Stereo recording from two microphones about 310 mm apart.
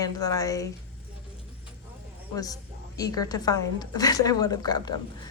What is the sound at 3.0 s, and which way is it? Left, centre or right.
A woman's voice, centre.